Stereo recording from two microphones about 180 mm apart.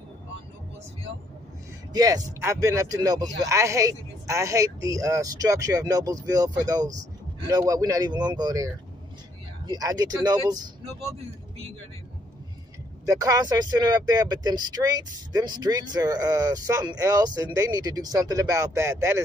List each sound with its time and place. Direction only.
2.0 s speech: 20° right (ahead or behind)
13.0 s speech: 20° right (ahead or behind)